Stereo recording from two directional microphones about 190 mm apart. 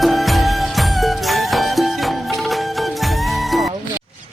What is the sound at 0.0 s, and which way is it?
Music, centre (ahead or behind).